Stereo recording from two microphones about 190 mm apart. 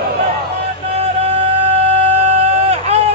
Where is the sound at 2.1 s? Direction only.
35° right (ahead or behind).